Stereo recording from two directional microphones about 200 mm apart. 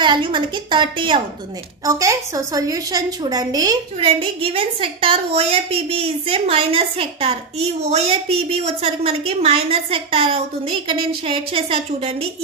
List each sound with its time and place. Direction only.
0.0 s a woman's voice: 25° right (ahead or behind)